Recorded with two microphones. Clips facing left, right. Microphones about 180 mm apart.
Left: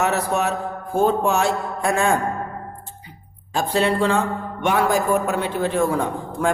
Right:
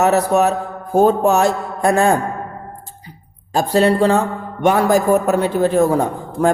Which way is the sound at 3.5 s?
40° right (ahead or behind).